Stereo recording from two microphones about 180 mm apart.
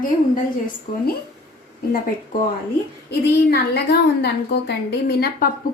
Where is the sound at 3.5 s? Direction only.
65° left (ahead or behind).